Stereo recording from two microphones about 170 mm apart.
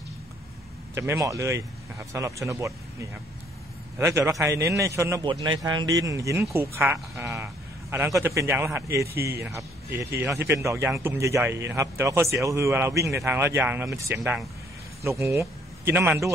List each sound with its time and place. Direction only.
0.9 s a man's voice: 15° right (ahead or behind)
4.3 s a man's voice: 15° right (ahead or behind)
5.2 s a man's voice: 30° right (ahead or behind)